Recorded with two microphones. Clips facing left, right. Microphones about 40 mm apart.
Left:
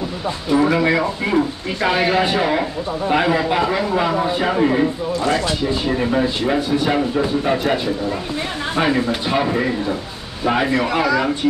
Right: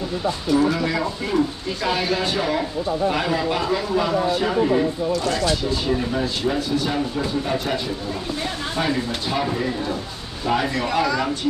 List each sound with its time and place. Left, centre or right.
0.5 s speech: left